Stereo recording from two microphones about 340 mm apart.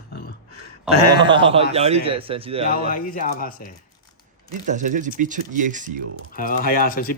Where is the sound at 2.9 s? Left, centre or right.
Left.